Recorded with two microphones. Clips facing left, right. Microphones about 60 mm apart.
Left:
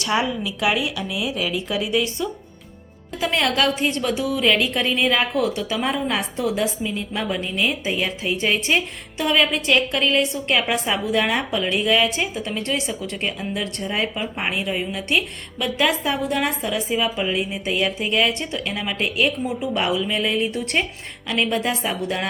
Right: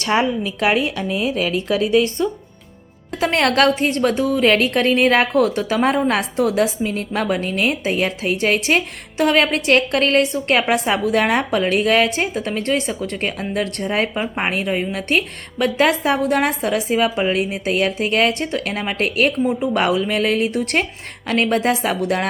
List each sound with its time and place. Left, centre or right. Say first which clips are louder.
0.0 s a woman's voice: right 4 dB; right